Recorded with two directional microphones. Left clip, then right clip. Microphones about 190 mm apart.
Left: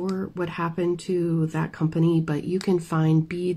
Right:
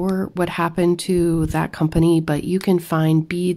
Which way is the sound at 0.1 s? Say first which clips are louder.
Right 7 dB; 50° right (ahead or behind).